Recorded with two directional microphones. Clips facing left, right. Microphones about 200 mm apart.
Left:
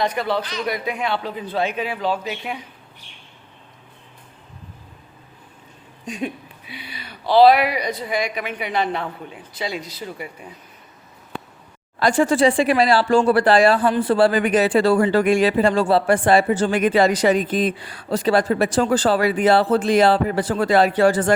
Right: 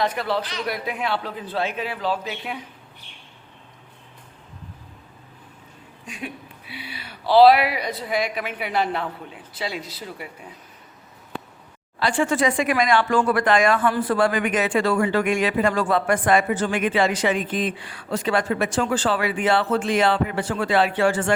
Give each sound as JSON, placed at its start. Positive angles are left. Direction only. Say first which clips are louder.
{"t": 0.0, "sound": "speech", "louder": "left 2 dB", "side_deg": 0}
{"t": 6.1, "sound": "speech", "louder": "left 7 dB", "side_deg": 35}
{"t": 6.7, "sound": "speech", "louder": "even", "side_deg": -5}
{"t": 11.9, "sound": "speech", "louder": "left 5 dB", "side_deg": 45}